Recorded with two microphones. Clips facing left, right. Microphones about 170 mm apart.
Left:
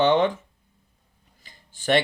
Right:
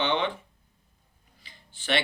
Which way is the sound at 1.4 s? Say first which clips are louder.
Left 8 dB; 45° left (ahead or behind).